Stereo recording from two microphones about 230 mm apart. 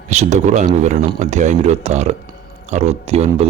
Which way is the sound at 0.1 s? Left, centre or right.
Right.